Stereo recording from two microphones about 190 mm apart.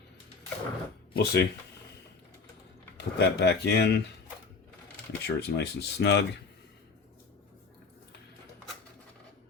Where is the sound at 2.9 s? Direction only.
60° left (ahead or behind).